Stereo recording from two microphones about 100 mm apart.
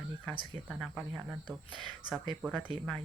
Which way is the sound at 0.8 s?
Centre (ahead or behind).